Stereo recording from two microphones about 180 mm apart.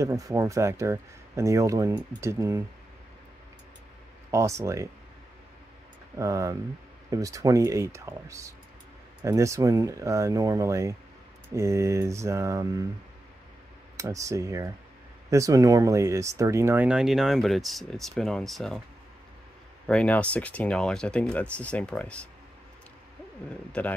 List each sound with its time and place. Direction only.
0.0 s speech: 15° right (ahead or behind)
4.3 s speech: 15° right (ahead or behind)
6.1 s speech: 15° right (ahead or behind)
13.9 s speech: 15° right (ahead or behind); by 18.8 s centre (ahead or behind)
19.9 s speech: 5° left (ahead or behind)
23.8 s speech: 5° left (ahead or behind)